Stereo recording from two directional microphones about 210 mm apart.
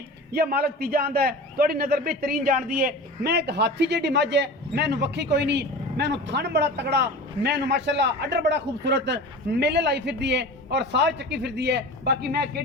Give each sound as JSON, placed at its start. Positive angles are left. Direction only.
{"t": 0.3, "sound": "a man's voice", "side_deg": -45}